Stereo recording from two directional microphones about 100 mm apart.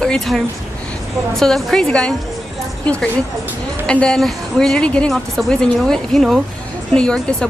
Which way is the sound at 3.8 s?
10° left (ahead or behind).